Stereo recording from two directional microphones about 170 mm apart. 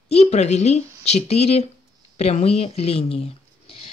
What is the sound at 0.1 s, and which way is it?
Speech, 40° left (ahead or behind).